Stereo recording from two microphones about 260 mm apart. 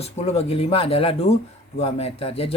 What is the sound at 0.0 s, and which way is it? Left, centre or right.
Speech, left.